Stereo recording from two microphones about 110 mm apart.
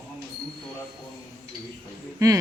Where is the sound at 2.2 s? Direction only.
30° right (ahead or behind).